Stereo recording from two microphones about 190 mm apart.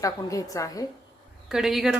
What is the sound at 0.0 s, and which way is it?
Speech, 15° left (ahead or behind).